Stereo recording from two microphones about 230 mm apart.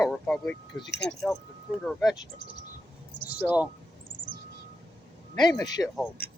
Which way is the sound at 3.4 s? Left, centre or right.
Centre.